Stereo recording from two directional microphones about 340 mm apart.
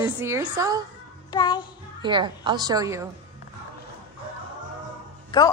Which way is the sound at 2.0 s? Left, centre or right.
Centre.